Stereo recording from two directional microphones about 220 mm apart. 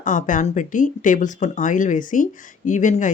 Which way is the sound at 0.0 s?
35° left (ahead or behind).